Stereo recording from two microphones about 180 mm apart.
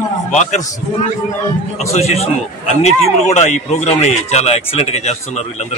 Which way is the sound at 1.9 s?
35° left (ahead or behind).